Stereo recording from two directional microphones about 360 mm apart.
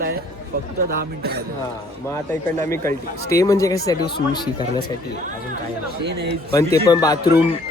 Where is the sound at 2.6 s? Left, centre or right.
Centre.